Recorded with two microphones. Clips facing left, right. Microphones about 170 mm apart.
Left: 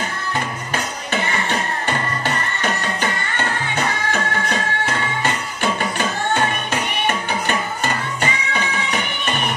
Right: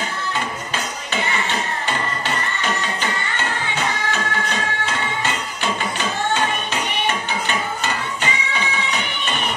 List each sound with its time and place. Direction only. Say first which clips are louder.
1.9 s music: left 2 dB; 50° left (ahead or behind)
7.1 s music: left 2 dB; 50° left (ahead or behind)